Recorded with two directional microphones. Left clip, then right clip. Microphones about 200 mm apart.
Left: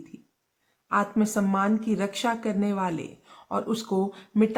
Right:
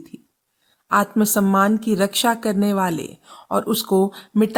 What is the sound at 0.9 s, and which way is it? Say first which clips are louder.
Speech: right 7 dB; 35° right (ahead or behind).